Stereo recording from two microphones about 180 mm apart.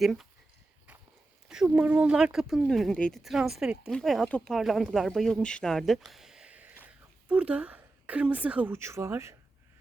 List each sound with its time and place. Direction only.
0.0 s speech: centre (ahead or behind)
1.5 s speech: 5° right (ahead or behind)